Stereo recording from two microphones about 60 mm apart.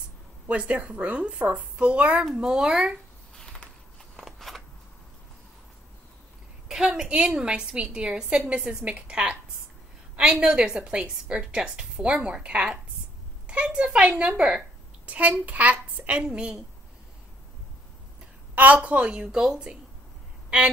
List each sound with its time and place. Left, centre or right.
0.5 s a woman's voice: right
3.3 s a sound: centre
4.2 s scissors: centre
6.7 s a woman's voice: centre
10.4 s a woman's voice: centre
15.0 s a woman's voice: right
18.5 s a woman's voice: right; by 19.6 s centre
20.4 s a sound: centre